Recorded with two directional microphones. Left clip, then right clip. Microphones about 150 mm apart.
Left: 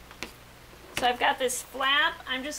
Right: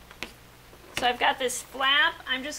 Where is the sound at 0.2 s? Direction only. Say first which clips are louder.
Right 1 dB; centre (ahead or behind).